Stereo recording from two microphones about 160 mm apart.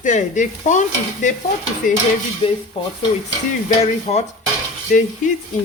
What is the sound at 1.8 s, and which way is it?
Stir, 55° left (ahead or behind).